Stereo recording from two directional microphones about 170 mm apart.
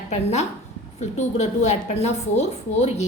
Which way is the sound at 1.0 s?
40° left (ahead or behind).